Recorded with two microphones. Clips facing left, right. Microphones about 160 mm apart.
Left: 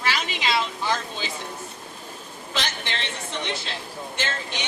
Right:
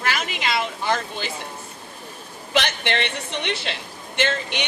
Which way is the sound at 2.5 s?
65° right (ahead or behind).